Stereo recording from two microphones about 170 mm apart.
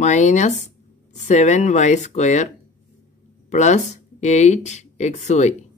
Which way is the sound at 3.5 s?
45° left (ahead or behind).